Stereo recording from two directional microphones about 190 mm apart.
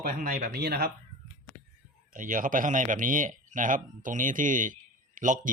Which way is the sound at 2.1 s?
45° right (ahead or behind).